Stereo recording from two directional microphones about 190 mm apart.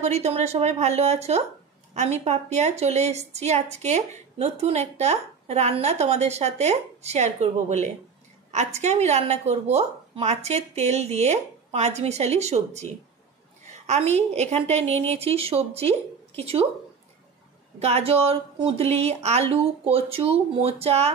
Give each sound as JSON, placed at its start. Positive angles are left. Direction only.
{"t": 0.0, "sound": "a woman's voice", "side_deg": -35}
{"t": 17.7, "sound": "a woman's voice", "side_deg": -35}